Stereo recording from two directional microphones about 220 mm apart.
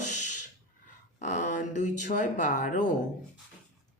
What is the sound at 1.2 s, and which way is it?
A woman's voice, 35° left (ahead or behind).